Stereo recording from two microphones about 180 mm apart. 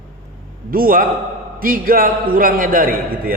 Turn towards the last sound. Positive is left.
turn(degrees=-55)  # may be behind; listen again after turning